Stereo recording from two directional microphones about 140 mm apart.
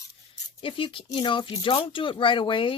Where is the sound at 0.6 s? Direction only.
40° left (ahead or behind).